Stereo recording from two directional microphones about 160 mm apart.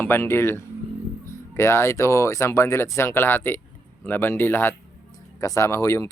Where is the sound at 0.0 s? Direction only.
15° left (ahead or behind).